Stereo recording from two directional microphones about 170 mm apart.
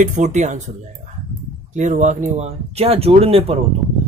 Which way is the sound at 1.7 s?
45° right (ahead or behind).